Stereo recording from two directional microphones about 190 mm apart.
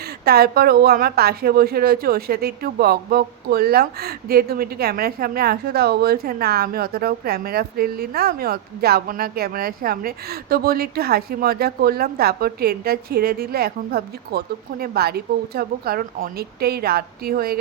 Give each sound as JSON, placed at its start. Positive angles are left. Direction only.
{"t": 0.3, "sound": "a woman's voice", "side_deg": -55}